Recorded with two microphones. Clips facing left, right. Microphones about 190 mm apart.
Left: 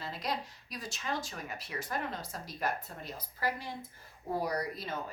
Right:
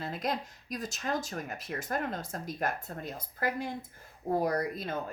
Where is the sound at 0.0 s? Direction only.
50° right (ahead or behind).